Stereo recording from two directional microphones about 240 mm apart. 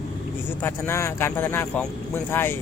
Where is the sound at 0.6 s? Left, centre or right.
Centre.